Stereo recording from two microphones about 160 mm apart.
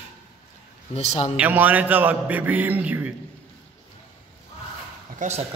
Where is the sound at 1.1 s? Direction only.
40° left (ahead or behind).